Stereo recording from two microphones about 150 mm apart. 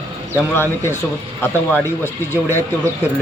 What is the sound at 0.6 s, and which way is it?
Speech, 15° left (ahead or behind).